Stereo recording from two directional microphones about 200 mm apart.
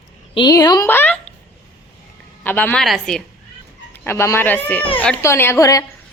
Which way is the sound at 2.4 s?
10° left (ahead or behind).